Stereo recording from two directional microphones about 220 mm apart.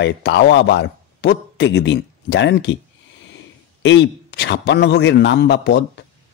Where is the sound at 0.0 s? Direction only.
50° left (ahead or behind).